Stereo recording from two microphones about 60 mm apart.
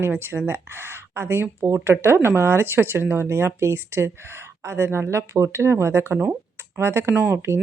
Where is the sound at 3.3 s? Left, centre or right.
Right.